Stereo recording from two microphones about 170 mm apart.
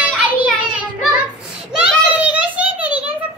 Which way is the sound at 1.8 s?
10° right (ahead or behind).